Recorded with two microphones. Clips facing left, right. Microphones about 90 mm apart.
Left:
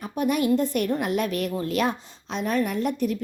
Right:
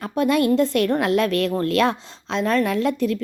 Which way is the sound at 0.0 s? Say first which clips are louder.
Right 5 dB; 90° right.